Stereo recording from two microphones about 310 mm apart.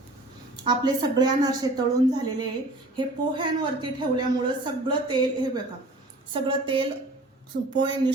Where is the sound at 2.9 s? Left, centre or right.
Centre.